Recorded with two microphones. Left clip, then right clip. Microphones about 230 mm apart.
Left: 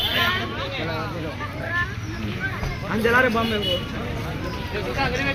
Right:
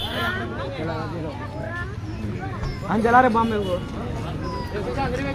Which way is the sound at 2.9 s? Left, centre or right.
Right.